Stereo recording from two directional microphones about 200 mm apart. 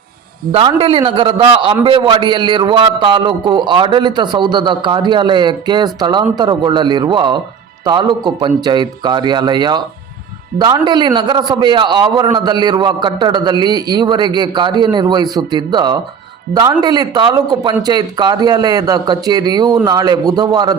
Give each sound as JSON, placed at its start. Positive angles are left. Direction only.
{"t": 0.5, "sound": "a man's voice", "side_deg": -30}